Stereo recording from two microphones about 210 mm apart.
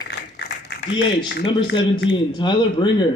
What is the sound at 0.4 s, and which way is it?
Speech, 55° left (ahead or behind).